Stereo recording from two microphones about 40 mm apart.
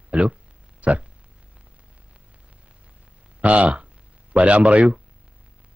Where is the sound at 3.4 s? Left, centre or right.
Right.